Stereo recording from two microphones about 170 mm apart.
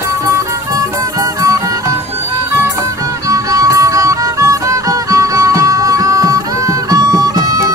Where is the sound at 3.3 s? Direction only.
20° right (ahead or behind).